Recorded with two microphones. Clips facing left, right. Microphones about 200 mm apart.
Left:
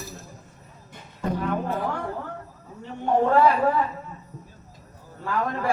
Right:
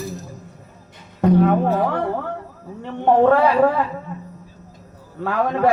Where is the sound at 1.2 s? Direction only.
70° right (ahead or behind).